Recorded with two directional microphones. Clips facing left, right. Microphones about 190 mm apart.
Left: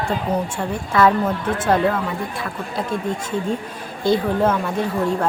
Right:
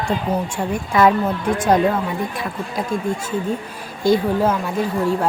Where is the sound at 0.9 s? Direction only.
15° right (ahead or behind).